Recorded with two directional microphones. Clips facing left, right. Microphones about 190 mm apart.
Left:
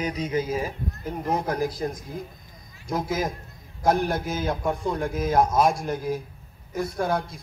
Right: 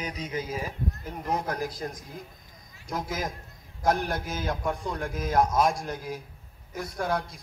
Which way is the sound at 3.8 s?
25° left (ahead or behind).